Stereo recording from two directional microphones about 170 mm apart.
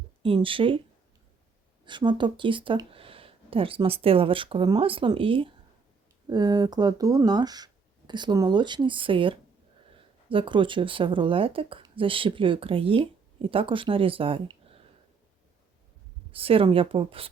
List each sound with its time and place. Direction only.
0.2 s speech: 30° right (ahead or behind)
1.8 s speech: 25° right (ahead or behind)
16.3 s speech: 35° right (ahead or behind)